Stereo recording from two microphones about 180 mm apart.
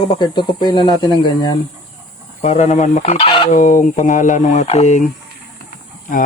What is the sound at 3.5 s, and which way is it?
Fowl, 45° left (ahead or behind).